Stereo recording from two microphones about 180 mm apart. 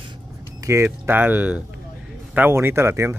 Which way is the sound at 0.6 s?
15° right (ahead or behind).